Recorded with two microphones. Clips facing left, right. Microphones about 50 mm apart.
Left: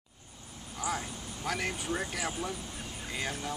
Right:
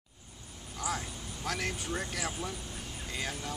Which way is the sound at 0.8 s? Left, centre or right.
Centre.